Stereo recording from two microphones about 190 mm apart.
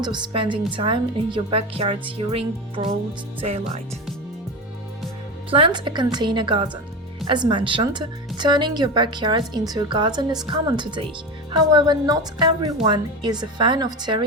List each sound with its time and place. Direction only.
0.0 s speech: 25° right (ahead or behind)
3.4 s music: 35° right (ahead or behind)
5.5 s speech: 30° right (ahead or behind)